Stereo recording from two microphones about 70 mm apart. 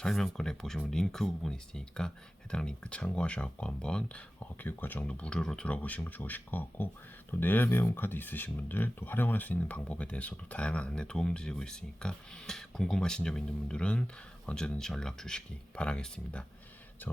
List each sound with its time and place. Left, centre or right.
0.0 s speech: centre
4.6 s speech: left